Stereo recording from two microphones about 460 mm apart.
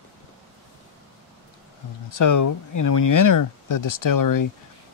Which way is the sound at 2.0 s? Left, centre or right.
Left.